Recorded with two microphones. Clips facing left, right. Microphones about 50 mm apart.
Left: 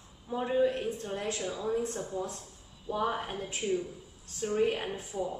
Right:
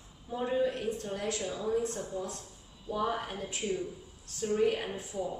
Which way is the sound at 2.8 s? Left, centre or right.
Centre.